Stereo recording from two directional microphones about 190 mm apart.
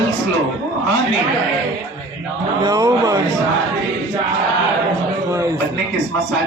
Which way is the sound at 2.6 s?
15° right (ahead or behind).